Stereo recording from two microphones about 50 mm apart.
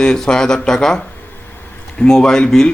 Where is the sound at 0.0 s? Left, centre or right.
Centre.